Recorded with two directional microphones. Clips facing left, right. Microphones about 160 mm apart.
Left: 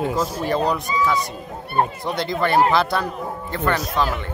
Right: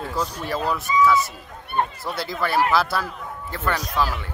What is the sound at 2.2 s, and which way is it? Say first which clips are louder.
A man's voice: left 4 dB; 5° right (ahead or behind).